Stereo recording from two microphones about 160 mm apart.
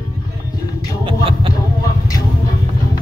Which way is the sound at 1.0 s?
35° right (ahead or behind).